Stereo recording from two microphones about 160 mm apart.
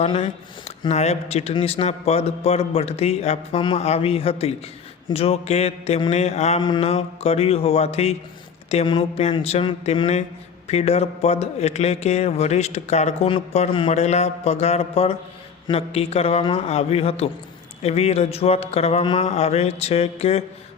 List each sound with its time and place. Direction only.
0.0 s speech: 40° left (ahead or behind)
6.6 s a man's voice: 30° left (ahead or behind)